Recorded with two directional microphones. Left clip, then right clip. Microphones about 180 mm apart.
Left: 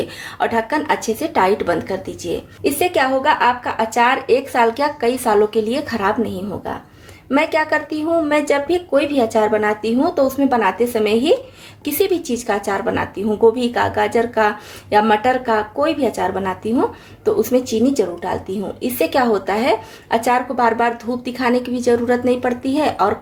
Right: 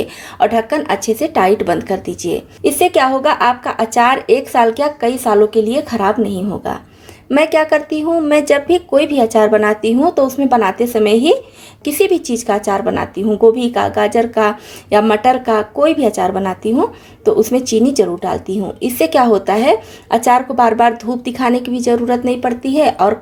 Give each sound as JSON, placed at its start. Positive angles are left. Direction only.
{"t": 0.3, "sound": "speech", "side_deg": -30}
{"t": 7.3, "sound": "speech", "side_deg": -35}